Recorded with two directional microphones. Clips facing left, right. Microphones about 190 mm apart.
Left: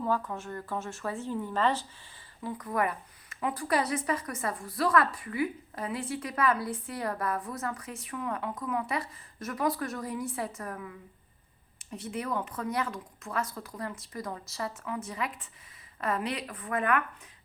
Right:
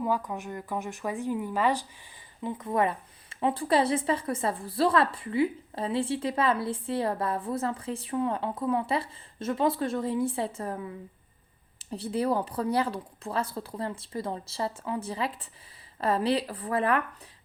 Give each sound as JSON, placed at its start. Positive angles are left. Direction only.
{"t": 0.0, "sound": "speech", "side_deg": -15}
{"t": 2.4, "sound": "speech", "side_deg": -25}